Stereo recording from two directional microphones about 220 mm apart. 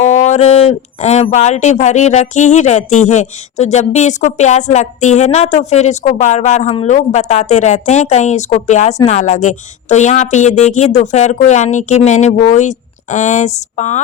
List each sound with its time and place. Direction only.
0.0 s a woman's voice: 30° left (ahead or behind)